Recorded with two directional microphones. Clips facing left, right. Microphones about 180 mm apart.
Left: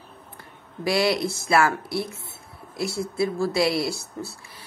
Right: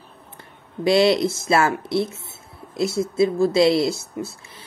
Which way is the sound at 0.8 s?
25° right (ahead or behind).